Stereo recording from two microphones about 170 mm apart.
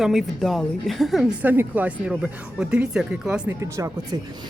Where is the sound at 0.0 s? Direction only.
Centre (ahead or behind).